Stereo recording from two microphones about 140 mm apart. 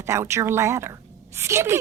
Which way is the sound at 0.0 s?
20° right (ahead or behind).